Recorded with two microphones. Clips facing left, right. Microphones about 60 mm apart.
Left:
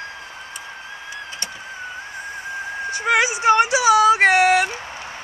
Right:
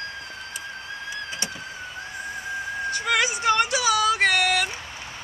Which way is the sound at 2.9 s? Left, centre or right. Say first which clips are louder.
Left 6 dB; left.